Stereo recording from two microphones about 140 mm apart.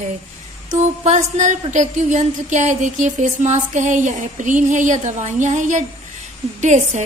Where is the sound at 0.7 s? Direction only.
60° right (ahead or behind).